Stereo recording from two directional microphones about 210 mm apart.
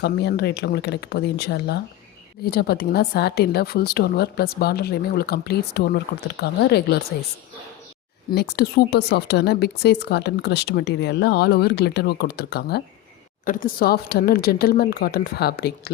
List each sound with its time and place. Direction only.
0.0 s a woman's voice: 50° left (ahead or behind)
8.3 s a woman's voice: 50° left (ahead or behind)
13.4 s a woman's voice: 40° left (ahead or behind)